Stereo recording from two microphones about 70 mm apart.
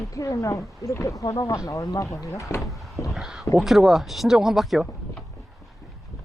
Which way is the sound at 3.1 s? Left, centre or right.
Centre.